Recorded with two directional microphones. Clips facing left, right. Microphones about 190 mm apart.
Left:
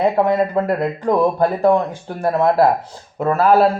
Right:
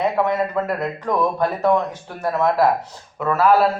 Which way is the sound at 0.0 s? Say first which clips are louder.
Left 4 dB; 30° left (ahead or behind).